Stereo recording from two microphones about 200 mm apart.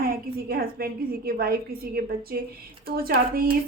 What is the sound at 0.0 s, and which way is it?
A woman's voice, 50° right (ahead or behind).